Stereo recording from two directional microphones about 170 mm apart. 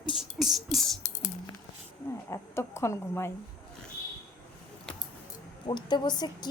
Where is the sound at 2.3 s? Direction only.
15° left (ahead or behind).